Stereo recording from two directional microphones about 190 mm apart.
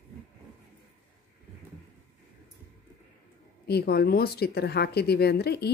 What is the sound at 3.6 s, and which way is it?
A woman's voice, 55° left (ahead or behind).